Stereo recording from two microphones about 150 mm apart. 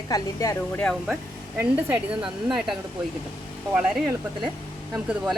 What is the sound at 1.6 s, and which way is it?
Speech, 10° right (ahead or behind).